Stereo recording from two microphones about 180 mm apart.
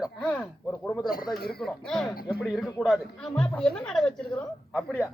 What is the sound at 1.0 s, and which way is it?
Speech, 55° left (ahead or behind).